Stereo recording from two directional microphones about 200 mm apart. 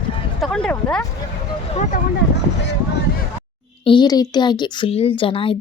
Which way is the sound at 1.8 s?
40° left (ahead or behind).